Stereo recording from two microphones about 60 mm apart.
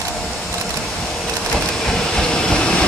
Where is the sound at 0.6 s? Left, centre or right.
Centre.